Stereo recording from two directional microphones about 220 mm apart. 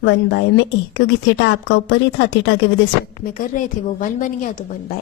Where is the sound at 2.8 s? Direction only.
40° left (ahead or behind).